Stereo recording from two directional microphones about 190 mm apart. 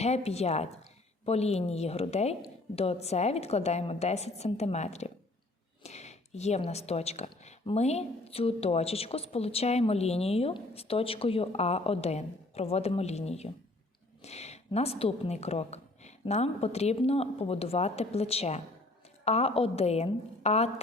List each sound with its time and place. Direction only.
0.0 s a woman's voice: 35° left (ahead or behind)